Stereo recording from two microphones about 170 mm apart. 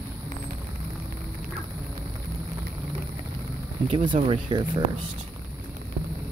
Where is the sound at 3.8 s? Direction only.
30° right (ahead or behind).